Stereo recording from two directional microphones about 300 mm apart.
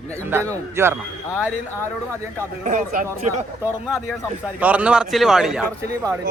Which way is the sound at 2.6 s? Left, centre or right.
Right.